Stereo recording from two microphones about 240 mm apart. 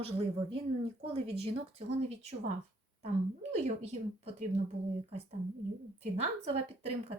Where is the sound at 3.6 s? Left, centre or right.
Right.